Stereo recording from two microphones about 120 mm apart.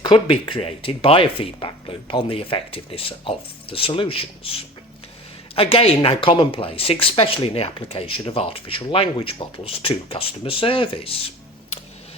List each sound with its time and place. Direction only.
0.0 s speech: 45° left (ahead or behind)